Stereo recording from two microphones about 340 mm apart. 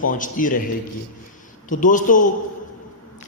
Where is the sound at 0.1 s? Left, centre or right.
Left.